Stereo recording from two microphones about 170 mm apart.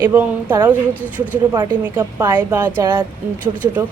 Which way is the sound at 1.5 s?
25° right (ahead or behind).